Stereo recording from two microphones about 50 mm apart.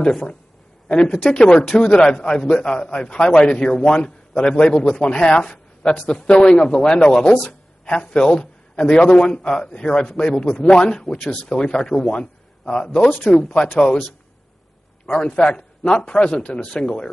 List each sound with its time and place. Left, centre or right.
0.8 s a man's voice: centre
15.0 s a man's voice: centre